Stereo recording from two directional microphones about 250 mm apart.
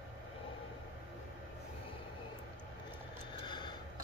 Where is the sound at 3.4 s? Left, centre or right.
Centre.